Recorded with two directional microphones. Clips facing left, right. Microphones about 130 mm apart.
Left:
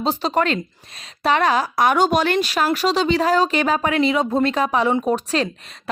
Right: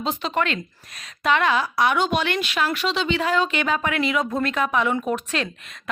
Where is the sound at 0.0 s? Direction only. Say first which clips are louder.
Left 4 dB; 35° left (ahead or behind).